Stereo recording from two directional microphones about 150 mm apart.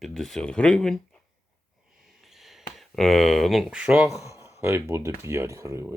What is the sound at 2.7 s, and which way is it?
Speech, centre (ahead or behind).